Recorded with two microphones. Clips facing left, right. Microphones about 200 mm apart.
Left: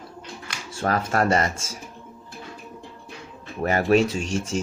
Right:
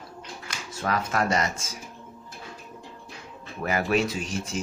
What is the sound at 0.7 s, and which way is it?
Speech, 35° left (ahead or behind).